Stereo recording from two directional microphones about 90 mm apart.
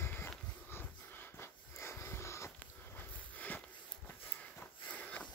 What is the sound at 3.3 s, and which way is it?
Sniff, 20° left (ahead or behind).